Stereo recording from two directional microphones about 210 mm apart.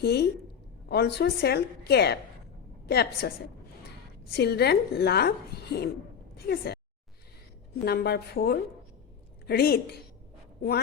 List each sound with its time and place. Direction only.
0.0 s a woman's voice: 50° left (ahead or behind)
4.4 s a woman's voice: 50° left (ahead or behind)
7.9 s a woman's voice: 50° left (ahead or behind)